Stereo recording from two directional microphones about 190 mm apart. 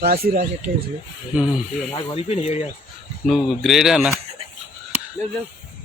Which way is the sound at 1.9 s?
30° left (ahead or behind).